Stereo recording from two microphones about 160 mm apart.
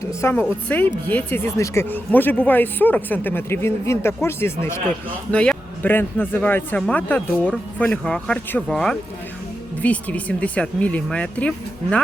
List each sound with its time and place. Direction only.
0.1 s speech: 15° left (ahead or behind)